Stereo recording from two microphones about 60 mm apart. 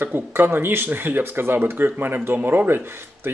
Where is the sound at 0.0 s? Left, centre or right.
Right.